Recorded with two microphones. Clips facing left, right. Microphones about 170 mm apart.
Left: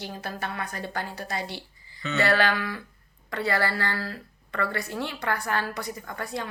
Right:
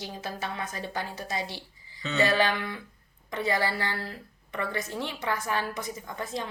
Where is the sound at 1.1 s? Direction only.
65° left (ahead or behind).